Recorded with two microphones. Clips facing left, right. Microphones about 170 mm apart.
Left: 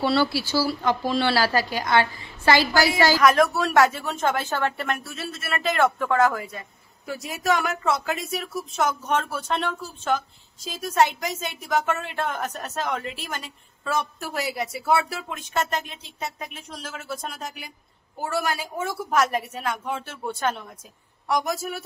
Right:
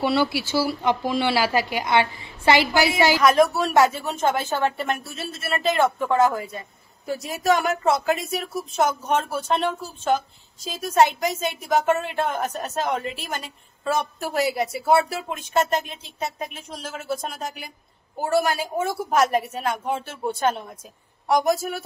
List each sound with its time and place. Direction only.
0.0 s a woman's voice: 20° right (ahead or behind)
11.7 s a woman's voice: 25° right (ahead or behind)